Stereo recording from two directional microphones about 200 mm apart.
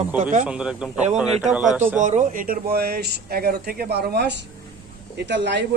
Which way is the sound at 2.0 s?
40° right (ahead or behind).